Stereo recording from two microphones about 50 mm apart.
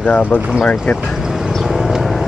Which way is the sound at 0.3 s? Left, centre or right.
Left.